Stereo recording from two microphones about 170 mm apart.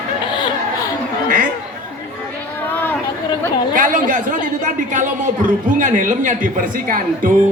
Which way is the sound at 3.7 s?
55° right (ahead or behind).